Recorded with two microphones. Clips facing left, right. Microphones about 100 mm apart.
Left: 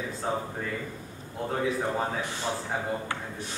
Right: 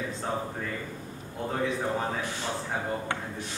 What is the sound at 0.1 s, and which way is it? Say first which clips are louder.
A man's voice: left 1 dB; centre (ahead or behind).